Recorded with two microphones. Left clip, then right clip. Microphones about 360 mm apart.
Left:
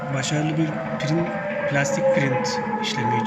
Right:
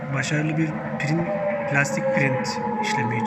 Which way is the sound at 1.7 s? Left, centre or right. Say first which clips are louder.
Left 4 dB; centre.